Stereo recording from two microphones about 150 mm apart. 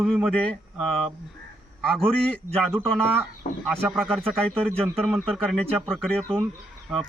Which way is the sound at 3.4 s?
60° left (ahead or behind).